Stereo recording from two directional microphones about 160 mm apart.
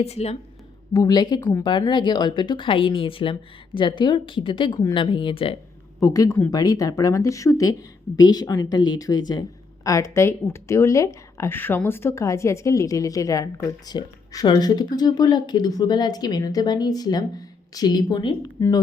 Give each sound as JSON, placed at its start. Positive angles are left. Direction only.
{"t": 0.0, "sound": "a woman's voice", "side_deg": 40}
{"t": 0.9, "sound": "a woman's voice", "side_deg": 25}
{"t": 6.1, "sound": "speech", "side_deg": 15}